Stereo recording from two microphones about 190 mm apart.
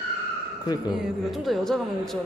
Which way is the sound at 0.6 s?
20° left (ahead or behind).